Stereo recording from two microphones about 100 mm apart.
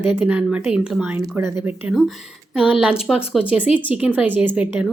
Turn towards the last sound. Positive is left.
turn(degrees=-15)  # may be behind; listen again after turning